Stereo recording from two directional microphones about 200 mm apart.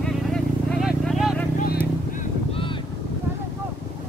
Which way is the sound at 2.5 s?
25° left (ahead or behind).